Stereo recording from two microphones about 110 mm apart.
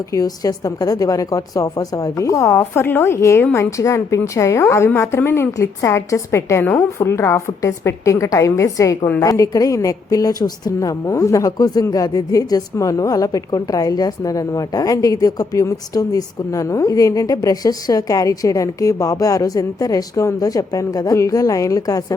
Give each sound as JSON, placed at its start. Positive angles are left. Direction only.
{"t": 0.1, "sound": "a woman's voice", "side_deg": 30}